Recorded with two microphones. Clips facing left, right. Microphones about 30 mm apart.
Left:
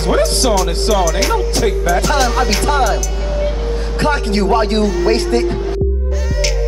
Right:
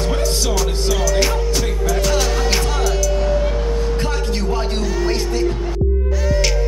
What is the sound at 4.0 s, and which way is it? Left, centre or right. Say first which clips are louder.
A man's voice: left 6 dB; left.